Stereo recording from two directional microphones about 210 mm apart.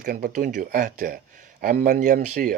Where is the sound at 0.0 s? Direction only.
40° right (ahead or behind).